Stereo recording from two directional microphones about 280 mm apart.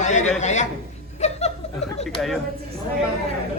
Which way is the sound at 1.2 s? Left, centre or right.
Left.